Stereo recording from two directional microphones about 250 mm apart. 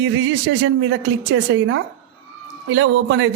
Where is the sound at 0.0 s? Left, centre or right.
Right.